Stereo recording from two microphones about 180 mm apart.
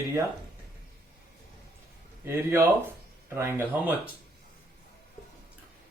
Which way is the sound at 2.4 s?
15° right (ahead or behind).